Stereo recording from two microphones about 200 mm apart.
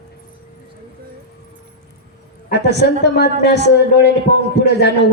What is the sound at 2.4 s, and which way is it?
A man's voice, 55° left (ahead or behind).